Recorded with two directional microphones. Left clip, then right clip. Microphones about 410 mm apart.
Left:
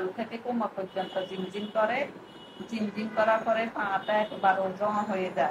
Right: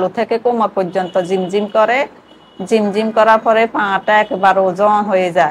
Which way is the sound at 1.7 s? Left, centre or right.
Right.